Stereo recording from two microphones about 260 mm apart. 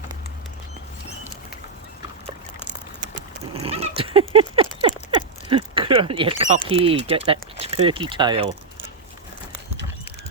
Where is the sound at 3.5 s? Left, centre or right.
Right.